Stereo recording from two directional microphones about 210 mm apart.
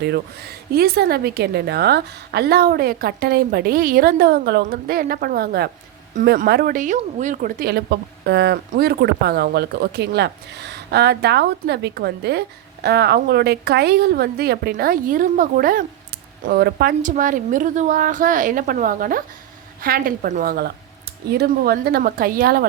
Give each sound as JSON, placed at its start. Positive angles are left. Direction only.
{"t": 0.0, "sound": "a woman's voice", "side_deg": -50}